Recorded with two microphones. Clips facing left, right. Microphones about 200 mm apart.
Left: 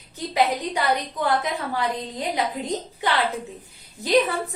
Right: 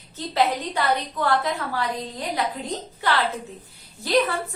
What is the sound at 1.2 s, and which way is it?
A woman's voice, 20° left (ahead or behind).